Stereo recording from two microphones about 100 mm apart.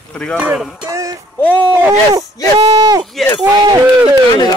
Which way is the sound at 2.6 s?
50° right (ahead or behind).